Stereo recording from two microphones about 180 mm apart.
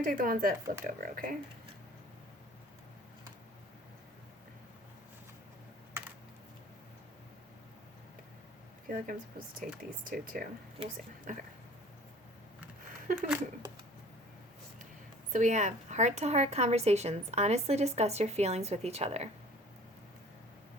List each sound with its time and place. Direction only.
0.0 s speech: 50° right (ahead or behind)
8.9 s speech: 50° right (ahead or behind)
13.1 s speech: 5° right (ahead or behind)
15.3 s a woman's voice: 45° right (ahead or behind)